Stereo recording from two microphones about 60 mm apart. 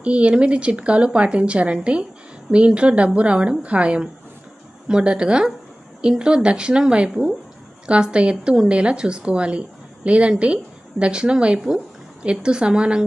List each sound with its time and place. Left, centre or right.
0.0 s a woman's voice: right